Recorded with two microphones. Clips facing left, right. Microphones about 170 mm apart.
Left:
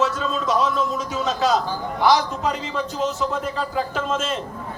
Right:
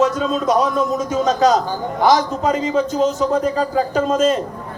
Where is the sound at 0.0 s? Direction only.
40° right (ahead or behind).